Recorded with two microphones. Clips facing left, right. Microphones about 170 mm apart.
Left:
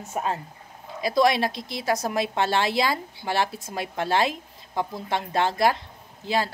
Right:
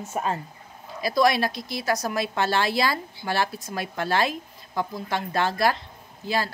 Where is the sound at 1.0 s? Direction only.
25° left (ahead or behind).